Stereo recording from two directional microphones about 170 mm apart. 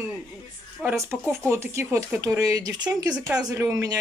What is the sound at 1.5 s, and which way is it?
Speech, 15° right (ahead or behind).